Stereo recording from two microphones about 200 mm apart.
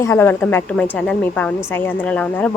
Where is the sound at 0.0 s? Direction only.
10° left (ahead or behind).